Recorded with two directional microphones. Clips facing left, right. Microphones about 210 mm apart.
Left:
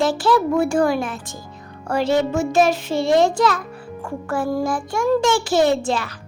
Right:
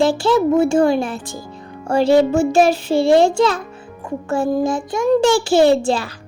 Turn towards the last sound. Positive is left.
turn(degrees=-30)  # may be behind; listen again after turning